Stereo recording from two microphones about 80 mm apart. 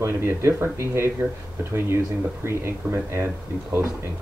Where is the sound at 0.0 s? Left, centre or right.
Right.